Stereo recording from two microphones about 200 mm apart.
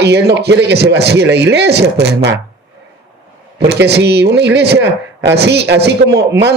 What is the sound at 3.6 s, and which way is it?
A man's voice, 55° right (ahead or behind).